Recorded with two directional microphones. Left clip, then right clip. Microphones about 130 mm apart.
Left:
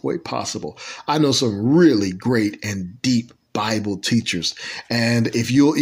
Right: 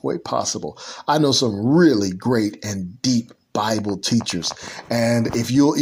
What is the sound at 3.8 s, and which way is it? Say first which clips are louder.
Speech: left 1 dB; 15° left (ahead or behind).